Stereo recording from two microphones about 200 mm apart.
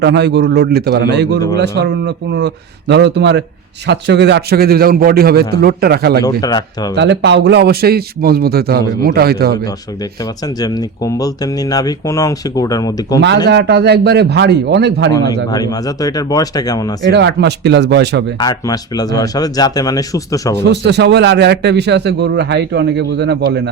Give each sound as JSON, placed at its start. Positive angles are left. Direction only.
{"t": 0.0, "sound": "a man's voice", "side_deg": -60}
{"t": 6.2, "sound": "speech", "side_deg": 20}
{"t": 6.9, "sound": "a man's voice", "side_deg": -60}
{"t": 10.6, "sound": "speech", "side_deg": 20}
{"t": 13.5, "sound": "a man's voice", "side_deg": -55}
{"t": 15.5, "sound": "speech", "side_deg": 20}
{"t": 17.0, "sound": "a man's voice", "side_deg": -60}
{"t": 18.3, "sound": "speech", "side_deg": 20}
{"t": 20.6, "sound": "a man's voice", "side_deg": -60}